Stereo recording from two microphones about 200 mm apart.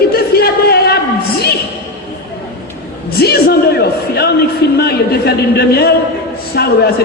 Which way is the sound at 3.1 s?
50° left (ahead or behind).